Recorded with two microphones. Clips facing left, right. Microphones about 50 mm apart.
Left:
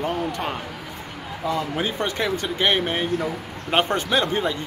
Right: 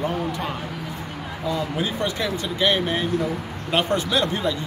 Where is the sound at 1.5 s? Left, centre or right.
Left.